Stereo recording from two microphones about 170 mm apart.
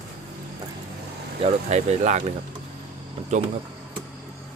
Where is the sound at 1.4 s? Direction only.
40° right (ahead or behind).